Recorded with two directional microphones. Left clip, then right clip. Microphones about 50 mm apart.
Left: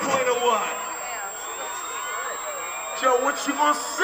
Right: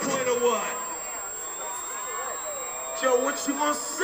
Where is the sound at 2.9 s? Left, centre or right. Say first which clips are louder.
Left 3 dB; right.